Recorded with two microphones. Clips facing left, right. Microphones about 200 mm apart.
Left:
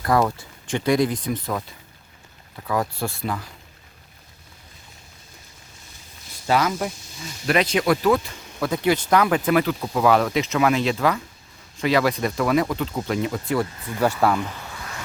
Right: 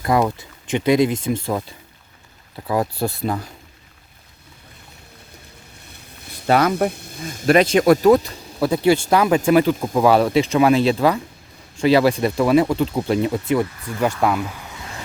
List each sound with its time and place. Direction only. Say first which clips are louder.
0.0 s speech: right 2 dB; 20° right (ahead or behind)
2.6 s speech: right 4 dB; 35° right (ahead or behind)
5.9 s speech: right 7 dB; 60° right (ahead or behind); by 10.1 s 20° right (ahead or behind)
10.1 s speech: right 4 dB; 30° right (ahead or behind)
14.0 s speech: right 1 dB; 10° left (ahead or behind)
14.3 s a sound: right 1 dB; 5° right (ahead or behind)